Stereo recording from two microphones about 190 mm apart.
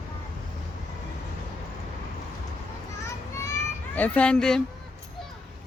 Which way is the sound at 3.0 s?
15° left (ahead or behind).